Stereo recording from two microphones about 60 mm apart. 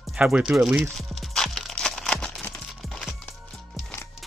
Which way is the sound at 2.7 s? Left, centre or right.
Centre.